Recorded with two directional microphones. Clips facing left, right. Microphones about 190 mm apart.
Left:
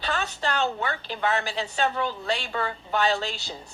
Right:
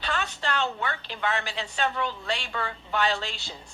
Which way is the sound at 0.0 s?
35° left (ahead or behind).